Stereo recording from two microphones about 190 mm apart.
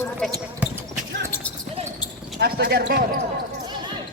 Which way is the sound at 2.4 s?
55° right (ahead or behind).